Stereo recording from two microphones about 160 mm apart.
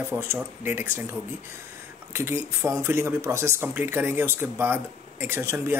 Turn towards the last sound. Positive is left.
turn(degrees=-15)  # may be behind; listen again after turning